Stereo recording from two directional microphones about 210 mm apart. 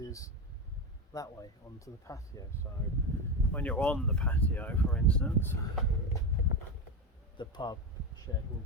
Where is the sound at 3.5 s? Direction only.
5° left (ahead or behind).